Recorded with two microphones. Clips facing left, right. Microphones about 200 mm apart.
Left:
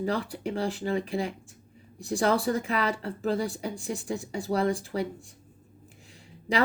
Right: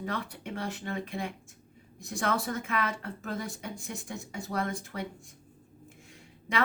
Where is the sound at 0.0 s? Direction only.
30° left (ahead or behind).